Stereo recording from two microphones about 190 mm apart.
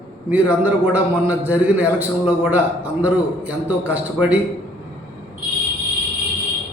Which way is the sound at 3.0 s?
10° right (ahead or behind).